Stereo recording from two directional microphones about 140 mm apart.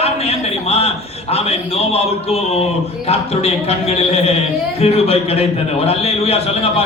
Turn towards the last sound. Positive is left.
turn(degrees=45)  # may be behind; listen again after turning